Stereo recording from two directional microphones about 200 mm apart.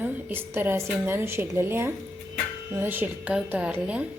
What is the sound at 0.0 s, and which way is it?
Speech, 10° right (ahead or behind).